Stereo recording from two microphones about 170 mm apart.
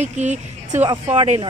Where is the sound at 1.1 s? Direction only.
30° right (ahead or behind).